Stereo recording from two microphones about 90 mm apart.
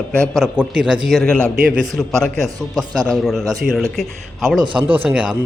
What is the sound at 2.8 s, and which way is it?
Speech, 50° right (ahead or behind).